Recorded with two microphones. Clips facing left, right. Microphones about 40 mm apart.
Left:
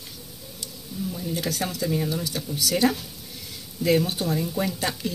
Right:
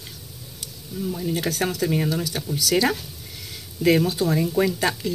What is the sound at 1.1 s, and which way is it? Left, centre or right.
Speech, right.